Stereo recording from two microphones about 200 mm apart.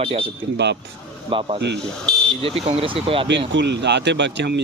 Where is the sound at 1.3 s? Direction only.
25° right (ahead or behind).